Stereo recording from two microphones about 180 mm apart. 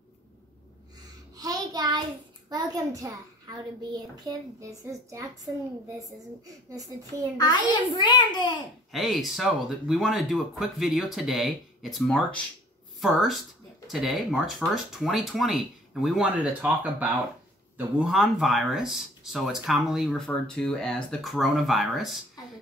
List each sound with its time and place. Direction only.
1.3 s a sound: 20° right (ahead or behind)
2.5 s a child's voice: 20° right (ahead or behind)
7.3 s a child's voice: 25° left (ahead or behind)
8.9 s speech: centre (ahead or behind)